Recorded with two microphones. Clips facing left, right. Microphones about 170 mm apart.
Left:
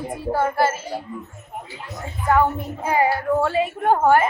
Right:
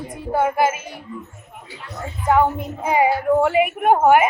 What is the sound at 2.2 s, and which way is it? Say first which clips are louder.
A woman's voice: right 1 dB; 15° right (ahead or behind).